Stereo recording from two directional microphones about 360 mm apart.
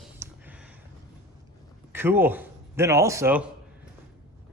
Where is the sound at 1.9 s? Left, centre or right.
Centre.